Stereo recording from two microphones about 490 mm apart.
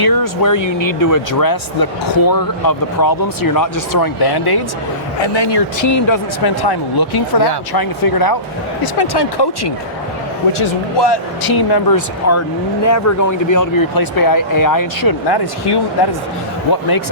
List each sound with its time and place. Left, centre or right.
0.0 s speech: left
5.2 s speech: left
5.8 s speech: left